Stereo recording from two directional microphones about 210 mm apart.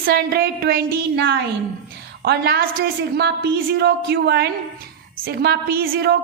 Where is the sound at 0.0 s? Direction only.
45° right (ahead or behind).